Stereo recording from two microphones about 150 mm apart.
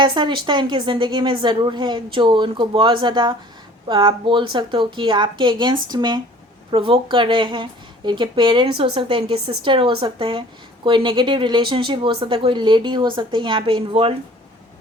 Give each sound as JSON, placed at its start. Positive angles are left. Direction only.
{"t": 0.0, "sound": "a woman's voice", "side_deg": -30}